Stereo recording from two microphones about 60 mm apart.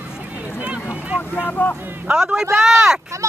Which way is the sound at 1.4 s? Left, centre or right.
Left.